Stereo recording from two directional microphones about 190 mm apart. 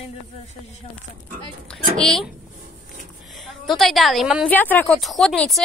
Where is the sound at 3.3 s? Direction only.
Centre (ahead or behind).